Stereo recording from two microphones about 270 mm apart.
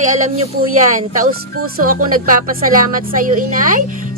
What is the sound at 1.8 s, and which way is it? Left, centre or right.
A woman's voice, right.